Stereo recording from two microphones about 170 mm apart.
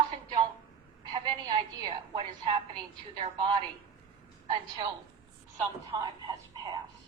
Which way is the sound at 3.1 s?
30° right (ahead or behind).